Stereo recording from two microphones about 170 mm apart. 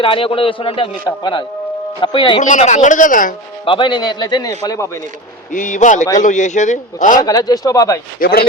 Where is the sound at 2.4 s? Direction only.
45° left (ahead or behind).